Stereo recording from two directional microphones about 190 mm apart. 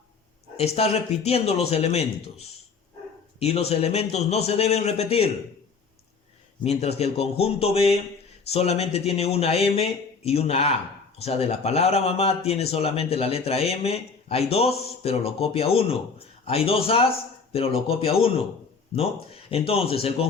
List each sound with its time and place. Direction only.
0.5 s speech: 30° left (ahead or behind)
6.7 s speech: 35° left (ahead or behind)